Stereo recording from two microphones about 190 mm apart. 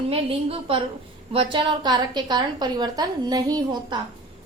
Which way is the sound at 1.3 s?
30° right (ahead or behind).